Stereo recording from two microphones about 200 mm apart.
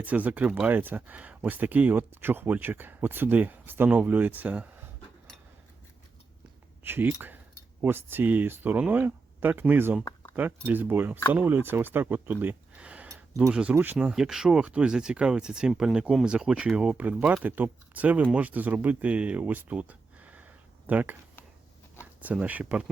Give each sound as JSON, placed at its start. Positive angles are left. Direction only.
{"t": 0.0, "sound": "speech", "side_deg": -5}
{"t": 6.8, "sound": "speech", "side_deg": -10}
{"t": 10.0, "sound": "a sound", "side_deg": 20}
{"t": 10.3, "sound": "speech", "side_deg": -10}